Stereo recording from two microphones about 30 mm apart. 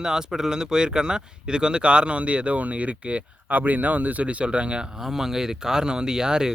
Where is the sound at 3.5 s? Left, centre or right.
Right.